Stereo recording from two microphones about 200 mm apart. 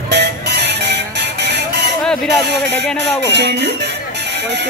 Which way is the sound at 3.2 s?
60° right (ahead or behind).